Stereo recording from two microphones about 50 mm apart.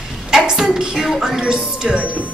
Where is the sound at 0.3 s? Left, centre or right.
Centre.